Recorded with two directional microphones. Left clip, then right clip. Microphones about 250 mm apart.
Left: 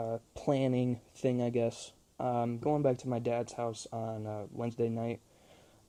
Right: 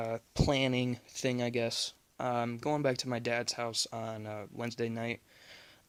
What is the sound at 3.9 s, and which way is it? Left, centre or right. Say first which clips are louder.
Speech: left 1 dB; centre.